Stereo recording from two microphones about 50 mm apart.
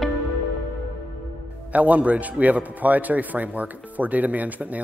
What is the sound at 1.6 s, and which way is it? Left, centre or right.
Speech, right.